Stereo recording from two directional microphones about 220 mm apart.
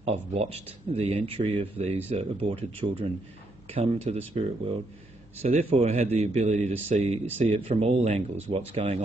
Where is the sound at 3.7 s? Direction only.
25° right (ahead or behind).